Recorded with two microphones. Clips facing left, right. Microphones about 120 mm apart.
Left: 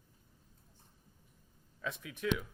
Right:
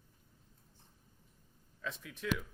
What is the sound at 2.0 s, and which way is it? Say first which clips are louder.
Speech: left 3 dB; 60° left (ahead or behind).